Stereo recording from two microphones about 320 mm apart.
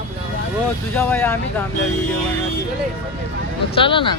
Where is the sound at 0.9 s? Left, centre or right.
Centre.